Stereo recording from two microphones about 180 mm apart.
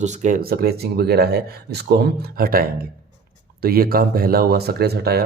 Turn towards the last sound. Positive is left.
turn(degrees=-60)  # may be behind; listen again after turning